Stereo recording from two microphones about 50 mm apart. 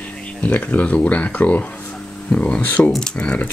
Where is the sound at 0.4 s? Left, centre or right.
Left.